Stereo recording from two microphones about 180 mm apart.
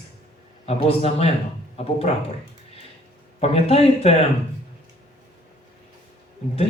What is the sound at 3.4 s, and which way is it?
Speech, 35° left (ahead or behind).